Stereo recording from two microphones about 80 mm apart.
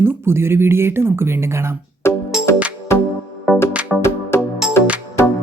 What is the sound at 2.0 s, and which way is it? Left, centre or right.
Music, left.